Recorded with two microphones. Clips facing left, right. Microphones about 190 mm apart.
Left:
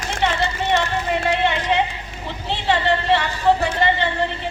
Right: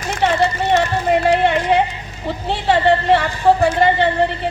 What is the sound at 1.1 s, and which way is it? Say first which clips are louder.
Speech: right 7 dB; 50° right (ahead or behind).